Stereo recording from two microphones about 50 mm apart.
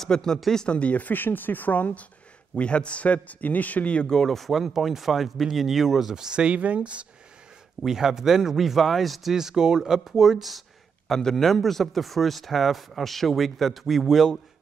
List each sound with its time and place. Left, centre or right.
0.0 s speech: centre
0.7 s speech: left
2.5 s speech: left
4.1 s speech: centre; by 7.1 s right
7.8 s speech: centre
11.1 s speech: centre